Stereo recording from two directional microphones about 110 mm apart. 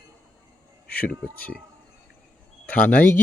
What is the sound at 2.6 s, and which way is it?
Speech, 15° left (ahead or behind).